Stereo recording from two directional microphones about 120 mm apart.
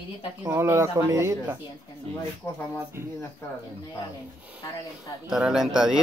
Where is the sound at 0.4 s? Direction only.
20° right (ahead or behind).